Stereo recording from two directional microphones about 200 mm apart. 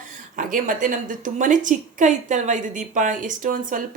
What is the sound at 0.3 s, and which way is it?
A woman's voice, 40° right (ahead or behind).